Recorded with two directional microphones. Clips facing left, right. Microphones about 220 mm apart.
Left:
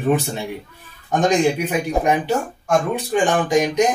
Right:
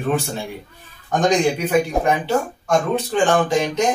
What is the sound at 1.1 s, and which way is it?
Speech, 10° left (ahead or behind).